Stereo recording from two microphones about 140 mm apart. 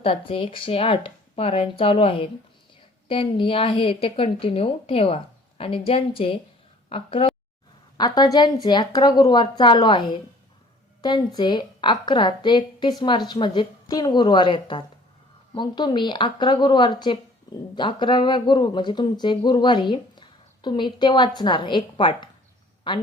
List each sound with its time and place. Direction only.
0.0 s speech: 40° left (ahead or behind)
11.3 s speech: 35° left (ahead or behind)